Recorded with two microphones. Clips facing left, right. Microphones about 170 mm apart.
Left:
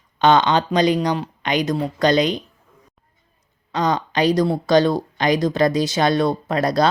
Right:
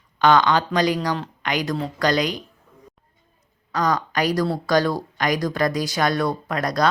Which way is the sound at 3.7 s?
25° left (ahead or behind).